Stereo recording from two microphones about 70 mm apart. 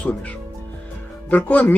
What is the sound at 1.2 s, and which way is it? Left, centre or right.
Speech, left.